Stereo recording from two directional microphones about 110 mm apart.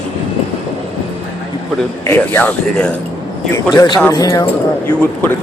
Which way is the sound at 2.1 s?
20° left (ahead or behind).